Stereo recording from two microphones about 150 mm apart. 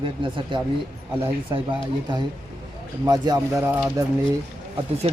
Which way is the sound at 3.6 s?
15° right (ahead or behind).